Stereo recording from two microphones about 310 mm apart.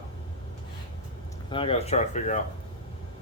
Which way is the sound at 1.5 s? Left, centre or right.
Centre.